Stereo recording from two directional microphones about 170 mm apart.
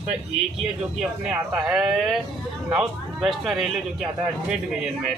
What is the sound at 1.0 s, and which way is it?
A man's voice, 5° right (ahead or behind).